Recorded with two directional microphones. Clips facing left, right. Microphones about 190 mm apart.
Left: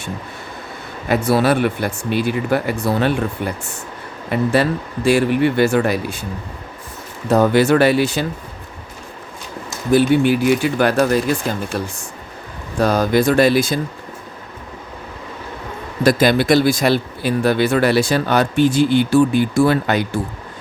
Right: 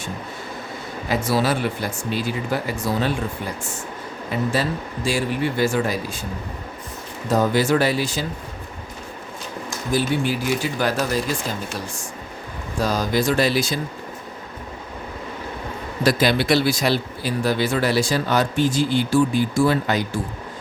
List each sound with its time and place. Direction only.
1.0 s speech: 60° left (ahead or behind)
4.3 s speech: 60° left (ahead or behind)
7.3 s speech: 65° left (ahead or behind)
9.9 s speech: 60° left (ahead or behind)
16.0 s speech: 50° left (ahead or behind)